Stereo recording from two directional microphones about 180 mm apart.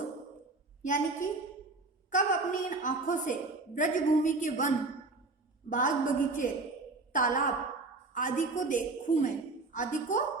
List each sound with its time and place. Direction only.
0.8 s a woman's voice: 45° left (ahead or behind)